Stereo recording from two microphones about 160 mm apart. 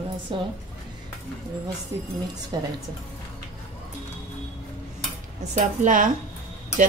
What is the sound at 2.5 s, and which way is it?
Speech, 25° right (ahead or behind).